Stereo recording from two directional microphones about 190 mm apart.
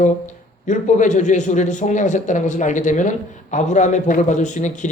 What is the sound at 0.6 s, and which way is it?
A man's voice, 40° left (ahead or behind).